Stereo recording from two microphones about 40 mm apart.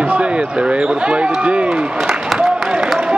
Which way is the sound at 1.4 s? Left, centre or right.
Right.